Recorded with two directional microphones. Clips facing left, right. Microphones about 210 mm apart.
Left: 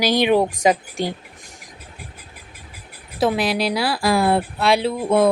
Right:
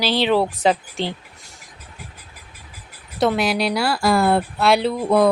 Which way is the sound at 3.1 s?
Centre (ahead or behind).